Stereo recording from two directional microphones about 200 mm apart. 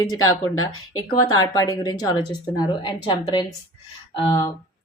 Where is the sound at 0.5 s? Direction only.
90° left.